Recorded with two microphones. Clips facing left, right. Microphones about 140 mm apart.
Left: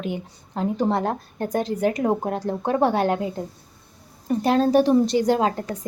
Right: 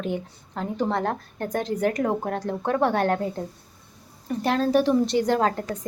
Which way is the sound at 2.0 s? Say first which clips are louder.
Left 2 dB; 20° left (ahead or behind).